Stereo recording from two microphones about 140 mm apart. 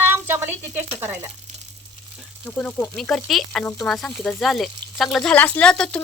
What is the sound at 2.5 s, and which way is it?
Speech, 10° left (ahead or behind).